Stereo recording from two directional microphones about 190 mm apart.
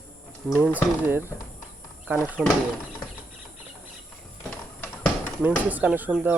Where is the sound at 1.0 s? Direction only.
10° right (ahead or behind).